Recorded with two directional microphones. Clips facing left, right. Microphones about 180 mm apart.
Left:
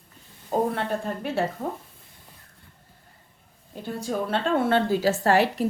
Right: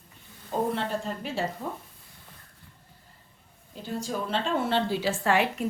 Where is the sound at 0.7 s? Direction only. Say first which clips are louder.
Left 2 dB; 55° left (ahead or behind).